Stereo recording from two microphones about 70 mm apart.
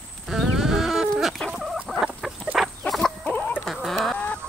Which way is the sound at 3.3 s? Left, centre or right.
Left.